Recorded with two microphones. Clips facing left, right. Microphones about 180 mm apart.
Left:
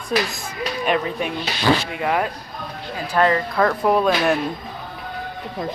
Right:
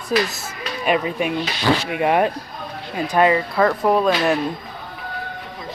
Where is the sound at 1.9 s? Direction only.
25° right (ahead or behind).